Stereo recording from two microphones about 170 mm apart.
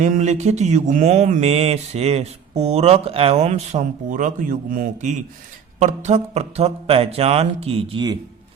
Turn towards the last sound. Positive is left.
turn(degrees=-35)  # may be behind; listen again after turning